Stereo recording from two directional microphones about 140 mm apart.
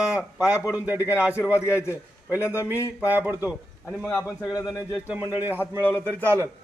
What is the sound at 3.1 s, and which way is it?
Speech, 15° right (ahead or behind).